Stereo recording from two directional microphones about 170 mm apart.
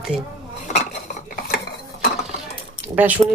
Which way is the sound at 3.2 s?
20° right (ahead or behind).